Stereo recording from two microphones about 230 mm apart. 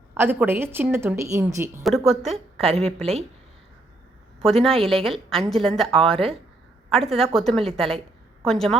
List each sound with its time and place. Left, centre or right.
0.1 s a woman's voice: centre
1.8 s a woman's voice: centre
2.6 s speech: right
4.4 s a woman's voice: centre